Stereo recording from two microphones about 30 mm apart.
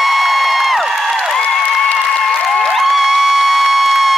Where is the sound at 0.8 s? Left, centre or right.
Centre.